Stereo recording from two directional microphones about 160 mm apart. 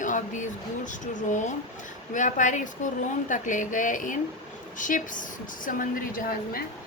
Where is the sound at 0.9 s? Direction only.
50° left (ahead or behind).